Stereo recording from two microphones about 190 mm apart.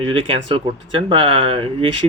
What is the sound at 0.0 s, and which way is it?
Speech, 30° right (ahead or behind).